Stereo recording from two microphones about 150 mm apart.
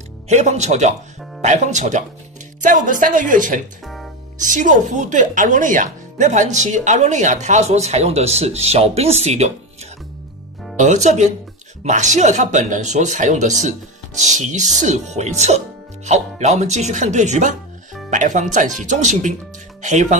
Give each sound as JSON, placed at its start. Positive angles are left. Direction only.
{"t": 0.3, "sound": "speech", "side_deg": -50}
{"t": 2.6, "sound": "a woman's voice", "side_deg": -65}
{"t": 3.8, "sound": "music", "side_deg": 0}
{"t": 4.4, "sound": "speech", "side_deg": -60}
{"t": 10.8, "sound": "a woman's voice", "side_deg": -50}